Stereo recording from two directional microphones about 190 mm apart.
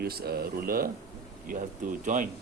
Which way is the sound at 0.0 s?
55° right (ahead or behind).